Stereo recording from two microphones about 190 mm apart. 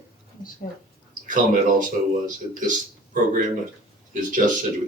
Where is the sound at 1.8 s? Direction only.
45° right (ahead or behind).